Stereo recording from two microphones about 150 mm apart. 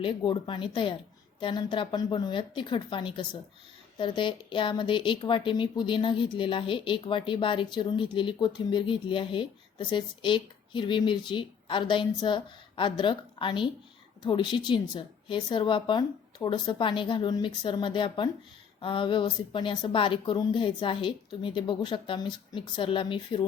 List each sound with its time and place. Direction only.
0.3 s speech: 35° left (ahead or behind)